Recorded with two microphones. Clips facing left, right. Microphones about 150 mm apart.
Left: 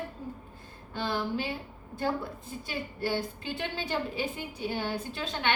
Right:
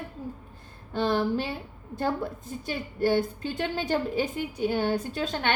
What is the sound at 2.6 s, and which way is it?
A woman's voice, 45° right (ahead or behind).